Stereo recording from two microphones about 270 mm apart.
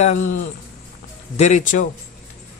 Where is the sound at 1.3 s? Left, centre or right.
Left.